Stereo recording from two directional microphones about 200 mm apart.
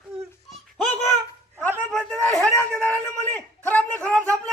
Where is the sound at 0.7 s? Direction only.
Centre (ahead or behind).